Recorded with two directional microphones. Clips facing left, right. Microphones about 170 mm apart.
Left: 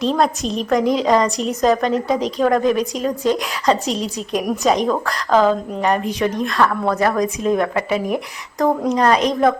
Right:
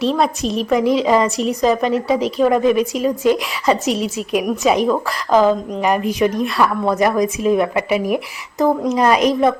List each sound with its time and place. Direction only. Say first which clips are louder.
0.0 s a woman's voice: right 1 dB; 5° right (ahead or behind)